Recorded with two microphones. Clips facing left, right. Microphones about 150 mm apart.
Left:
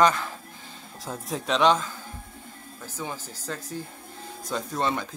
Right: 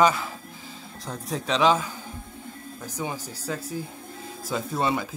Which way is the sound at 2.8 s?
15° right (ahead or behind).